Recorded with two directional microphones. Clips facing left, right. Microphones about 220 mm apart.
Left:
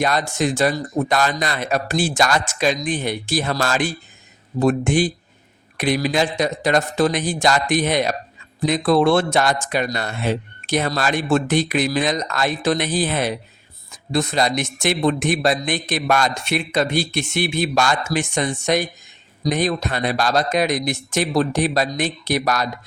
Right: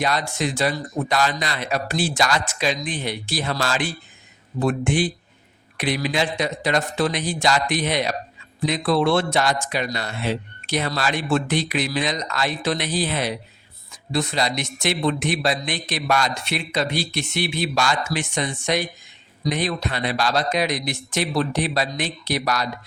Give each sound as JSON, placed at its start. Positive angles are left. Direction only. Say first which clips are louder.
{"t": 0.0, "sound": "speech", "louder": "left 3 dB", "side_deg": 50}